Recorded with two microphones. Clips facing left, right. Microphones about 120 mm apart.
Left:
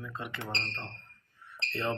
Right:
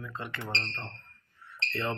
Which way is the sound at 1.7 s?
20° left (ahead or behind).